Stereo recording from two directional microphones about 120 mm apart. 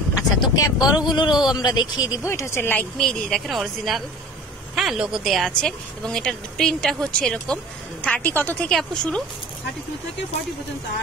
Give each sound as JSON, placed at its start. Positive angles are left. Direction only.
{"t": 0.1, "sound": "vehicle", "side_deg": 30}
{"t": 0.9, "sound": "speech", "side_deg": 40}
{"t": 3.0, "sound": "a woman's voice", "side_deg": 5}